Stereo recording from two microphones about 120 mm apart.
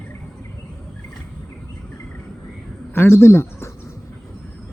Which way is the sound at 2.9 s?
20° left (ahead or behind).